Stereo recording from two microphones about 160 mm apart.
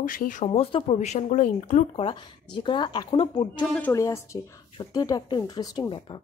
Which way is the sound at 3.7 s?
15° left (ahead or behind).